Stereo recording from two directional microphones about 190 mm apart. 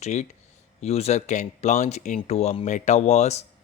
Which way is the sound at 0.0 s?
40° left (ahead or behind).